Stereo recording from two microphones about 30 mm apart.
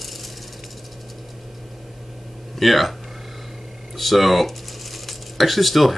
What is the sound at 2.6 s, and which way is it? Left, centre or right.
Speech, centre.